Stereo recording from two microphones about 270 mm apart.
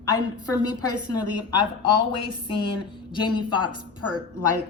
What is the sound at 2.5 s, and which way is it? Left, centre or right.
A woman's voice, centre.